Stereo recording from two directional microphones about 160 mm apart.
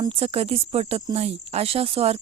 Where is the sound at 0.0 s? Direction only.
35° right (ahead or behind).